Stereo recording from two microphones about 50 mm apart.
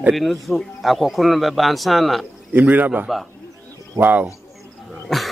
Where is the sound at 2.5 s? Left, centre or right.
Right.